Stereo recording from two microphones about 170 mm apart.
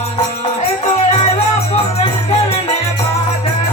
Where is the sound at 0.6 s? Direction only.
40° left (ahead or behind).